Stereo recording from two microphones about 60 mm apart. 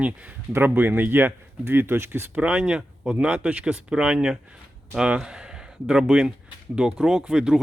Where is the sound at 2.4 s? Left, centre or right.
Centre.